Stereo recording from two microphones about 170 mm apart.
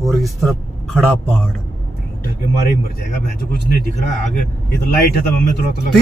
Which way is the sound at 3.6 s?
65° left (ahead or behind).